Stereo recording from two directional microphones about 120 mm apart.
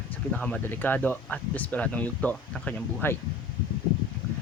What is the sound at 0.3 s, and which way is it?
Speech, 10° left (ahead or behind).